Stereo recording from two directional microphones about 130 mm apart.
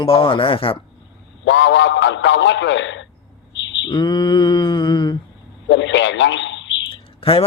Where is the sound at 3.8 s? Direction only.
35° left (ahead or behind).